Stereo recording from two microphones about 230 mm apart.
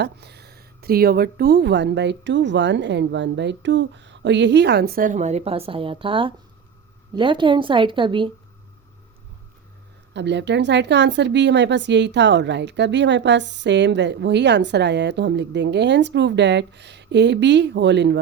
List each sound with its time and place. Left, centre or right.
0.0 s a woman's voice: right
10.2 s a woman's voice: right